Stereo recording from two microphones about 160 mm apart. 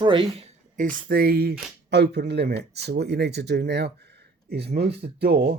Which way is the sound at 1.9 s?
90° right.